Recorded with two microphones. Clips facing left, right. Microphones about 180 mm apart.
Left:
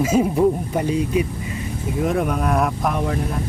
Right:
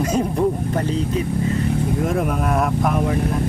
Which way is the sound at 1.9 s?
Centre (ahead or behind).